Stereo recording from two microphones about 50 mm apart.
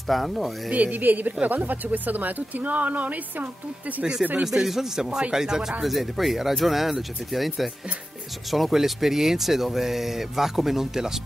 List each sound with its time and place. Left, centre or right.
0.1 s speech: centre
0.7 s a woman's voice: right
0.9 s speech: right
4.0 s speech: centre